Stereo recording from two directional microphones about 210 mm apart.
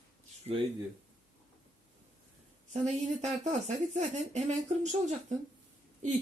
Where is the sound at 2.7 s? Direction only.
30° right (ahead or behind).